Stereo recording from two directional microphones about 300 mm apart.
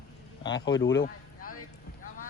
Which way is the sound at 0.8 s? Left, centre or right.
Left.